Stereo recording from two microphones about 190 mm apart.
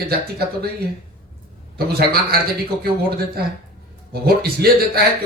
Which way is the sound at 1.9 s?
55° right (ahead or behind).